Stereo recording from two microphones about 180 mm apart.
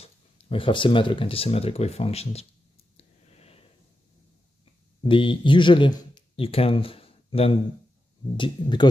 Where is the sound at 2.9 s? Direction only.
35° left (ahead or behind).